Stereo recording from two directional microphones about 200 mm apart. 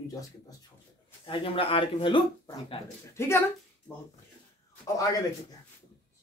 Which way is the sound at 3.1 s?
15° left (ahead or behind).